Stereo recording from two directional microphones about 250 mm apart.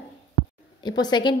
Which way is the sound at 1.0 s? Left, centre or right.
Centre.